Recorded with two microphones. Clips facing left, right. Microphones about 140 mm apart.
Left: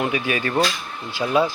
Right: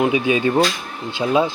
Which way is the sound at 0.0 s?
20° right (ahead or behind).